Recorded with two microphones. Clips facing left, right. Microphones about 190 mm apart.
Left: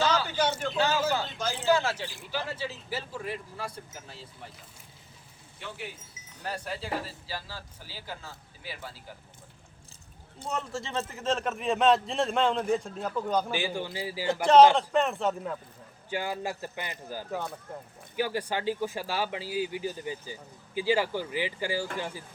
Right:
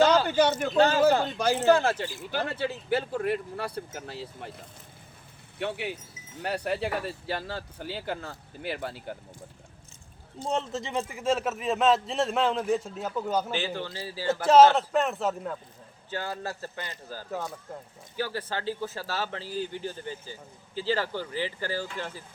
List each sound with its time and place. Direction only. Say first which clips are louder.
0.0 s a sound: right 6 dB; 60° right (ahead or behind)
0.7 s a man's voice: right 6 dB; 50° right (ahead or behind)
5.5 s a man's voice: right 9 dB; 70° right (ahead or behind)
10.5 s a man's voice: right 3 dB; 20° right (ahead or behind)
13.5 s speech: even; 10° left (ahead or behind)
14.4 s a man's voice: even; 5° right (ahead or behind)
16.0 s speech: left 2 dB; 15° left (ahead or behind)